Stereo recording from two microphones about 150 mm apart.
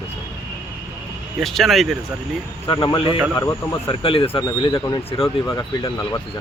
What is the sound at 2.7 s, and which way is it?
Speech, 30° left (ahead or behind).